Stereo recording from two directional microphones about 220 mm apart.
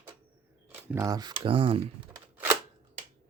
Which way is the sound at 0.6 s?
10° right (ahead or behind).